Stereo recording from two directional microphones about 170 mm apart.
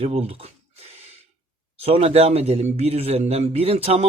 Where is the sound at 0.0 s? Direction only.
35° right (ahead or behind).